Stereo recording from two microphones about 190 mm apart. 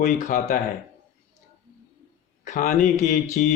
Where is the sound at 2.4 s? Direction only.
40° left (ahead or behind).